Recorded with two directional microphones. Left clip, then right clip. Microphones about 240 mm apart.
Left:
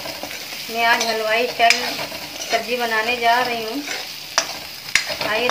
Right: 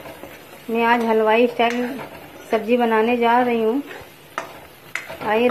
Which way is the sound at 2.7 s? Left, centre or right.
Right.